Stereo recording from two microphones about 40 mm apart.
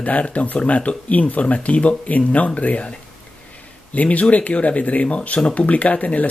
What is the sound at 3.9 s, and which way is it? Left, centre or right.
Speech, left.